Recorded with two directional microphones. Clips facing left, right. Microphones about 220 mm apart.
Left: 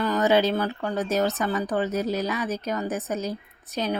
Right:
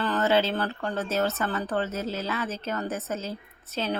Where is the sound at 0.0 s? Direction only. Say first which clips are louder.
Left 3 dB; 15° left (ahead or behind).